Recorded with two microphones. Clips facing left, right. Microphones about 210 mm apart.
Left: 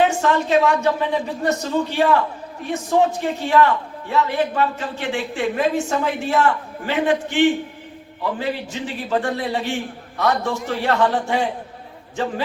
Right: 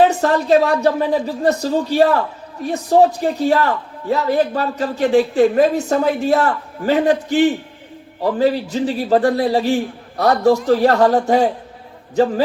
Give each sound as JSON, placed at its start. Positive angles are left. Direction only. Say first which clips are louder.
{"t": 0.0, "sound": "a man's voice", "louder": "right 4 dB", "side_deg": -35}